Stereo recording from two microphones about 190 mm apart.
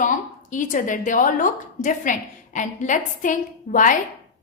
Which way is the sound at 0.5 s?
45° left (ahead or behind).